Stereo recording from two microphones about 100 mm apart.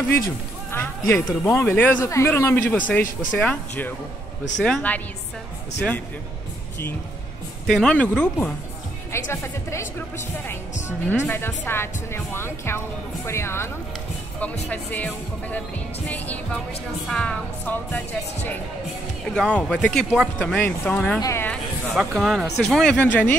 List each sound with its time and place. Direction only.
0.1 s speech: 25° left (ahead or behind)
4.6 s speech: 10° left (ahead or behind)
7.6 s speech: 5° left (ahead or behind)
9.1 s speech: 25° left (ahead or behind)
14.7 s speech: 15° left (ahead or behind)
17.1 s speech: 10° left (ahead or behind)
21.9 s speech: 5° right (ahead or behind)
22.9 s speech: 15° left (ahead or behind)